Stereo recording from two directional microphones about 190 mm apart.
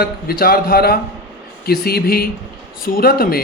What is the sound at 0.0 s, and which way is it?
Speech, 50° left (ahead or behind).